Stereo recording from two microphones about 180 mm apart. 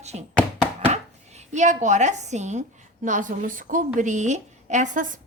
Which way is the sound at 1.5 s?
40° right (ahead or behind).